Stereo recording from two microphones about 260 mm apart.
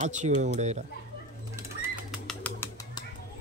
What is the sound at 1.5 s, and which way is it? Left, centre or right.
Bird, centre.